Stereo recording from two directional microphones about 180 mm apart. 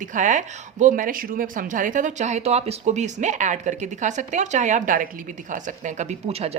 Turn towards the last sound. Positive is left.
turn(degrees=-35)  # may be behind; listen again after turning